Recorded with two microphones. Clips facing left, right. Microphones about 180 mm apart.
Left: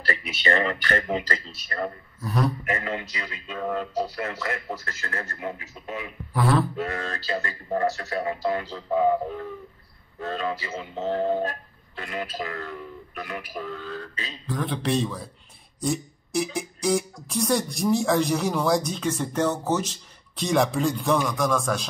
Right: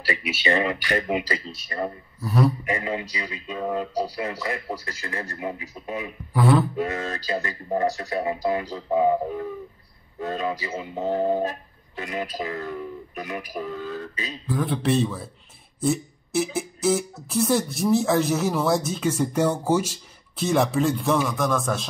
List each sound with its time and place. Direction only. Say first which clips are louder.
0.3 s speech: right 1 dB; 10° right (ahead or behind)
2.2 s speech: right 3 dB; 5° right (ahead or behind)